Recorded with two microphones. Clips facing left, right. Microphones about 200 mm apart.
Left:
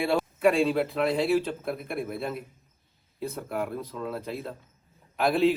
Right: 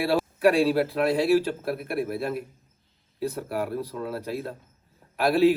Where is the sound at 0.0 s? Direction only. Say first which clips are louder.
Right 2 dB; 5° right (ahead or behind).